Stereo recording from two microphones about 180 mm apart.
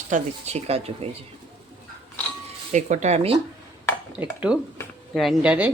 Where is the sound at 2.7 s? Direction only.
40° right (ahead or behind).